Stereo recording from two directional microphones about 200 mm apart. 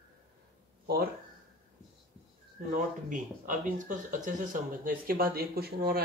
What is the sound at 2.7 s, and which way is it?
Speech, 40° right (ahead or behind).